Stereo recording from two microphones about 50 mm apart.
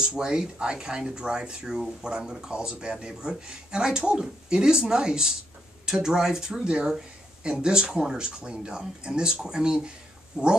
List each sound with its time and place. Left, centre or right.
0.1 s speech: centre